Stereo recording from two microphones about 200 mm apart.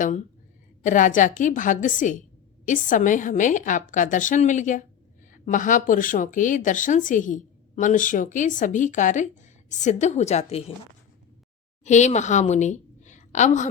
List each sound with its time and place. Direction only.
0.8 s speech: 40° left (ahead or behind)
11.9 s a woman's voice: 35° left (ahead or behind)